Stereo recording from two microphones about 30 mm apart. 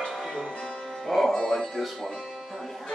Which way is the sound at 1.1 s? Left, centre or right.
Centre.